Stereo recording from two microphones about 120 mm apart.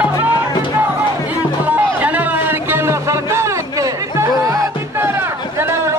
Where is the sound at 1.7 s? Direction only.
15° right (ahead or behind).